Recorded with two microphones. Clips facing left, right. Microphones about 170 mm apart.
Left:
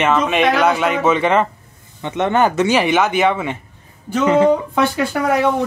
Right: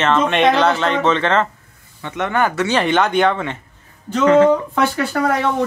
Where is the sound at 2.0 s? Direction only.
20° left (ahead or behind).